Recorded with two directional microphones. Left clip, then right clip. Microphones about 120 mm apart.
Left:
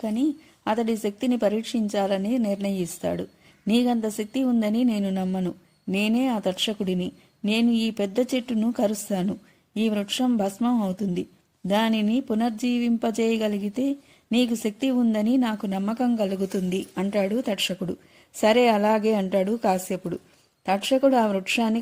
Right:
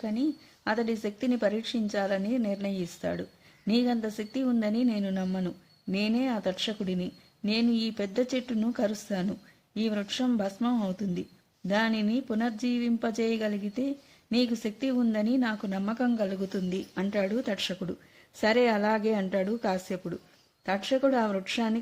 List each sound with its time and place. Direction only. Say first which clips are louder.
0.0 s a woman's voice: left 5 dB; 30° left (ahead or behind)